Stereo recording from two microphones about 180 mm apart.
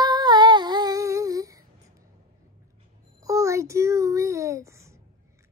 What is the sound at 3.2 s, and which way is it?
A child's voice, 15° right (ahead or behind).